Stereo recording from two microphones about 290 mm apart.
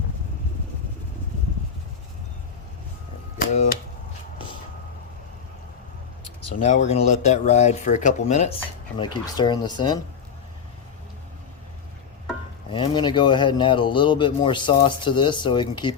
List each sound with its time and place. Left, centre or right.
3.3 s typewriter: left
6.6 s speech: left
12.7 s speech: centre